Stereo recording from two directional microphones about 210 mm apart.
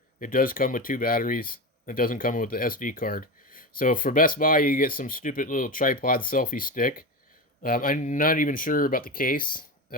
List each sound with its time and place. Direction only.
0.2 s speech: 40° left (ahead or behind)